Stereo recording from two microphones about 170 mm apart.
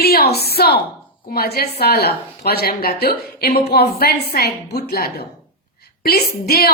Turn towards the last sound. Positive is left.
turn(degrees=65)  # may be behind; listen again after turning